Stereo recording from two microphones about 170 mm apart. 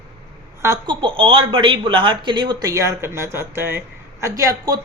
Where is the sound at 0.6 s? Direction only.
25° right (ahead or behind).